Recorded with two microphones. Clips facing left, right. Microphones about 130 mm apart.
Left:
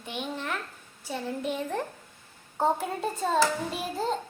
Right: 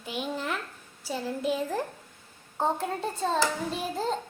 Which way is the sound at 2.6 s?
10° left (ahead or behind).